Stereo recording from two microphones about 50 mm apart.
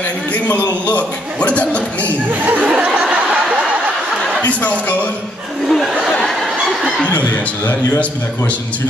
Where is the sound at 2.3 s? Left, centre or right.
Right.